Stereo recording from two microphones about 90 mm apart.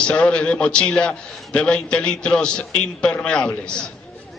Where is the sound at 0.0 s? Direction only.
10° left (ahead or behind).